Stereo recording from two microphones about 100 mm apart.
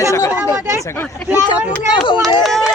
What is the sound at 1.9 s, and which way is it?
Speech, 60° left (ahead or behind).